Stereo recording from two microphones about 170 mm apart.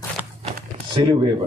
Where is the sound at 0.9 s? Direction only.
30° right (ahead or behind).